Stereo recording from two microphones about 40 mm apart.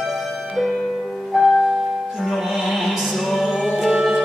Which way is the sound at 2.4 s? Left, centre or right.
Centre.